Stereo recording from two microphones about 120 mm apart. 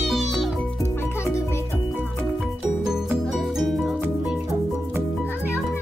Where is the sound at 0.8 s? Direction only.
25° left (ahead or behind).